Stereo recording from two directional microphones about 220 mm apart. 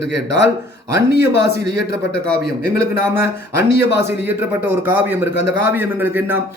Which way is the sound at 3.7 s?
50° left (ahead or behind).